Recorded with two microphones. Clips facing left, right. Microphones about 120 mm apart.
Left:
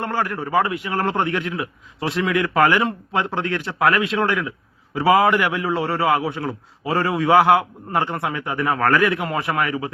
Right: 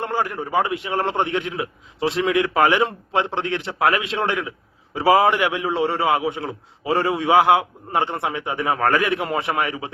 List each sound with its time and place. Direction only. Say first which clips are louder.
0.0 s a man's voice: even; 20° right (ahead or behind)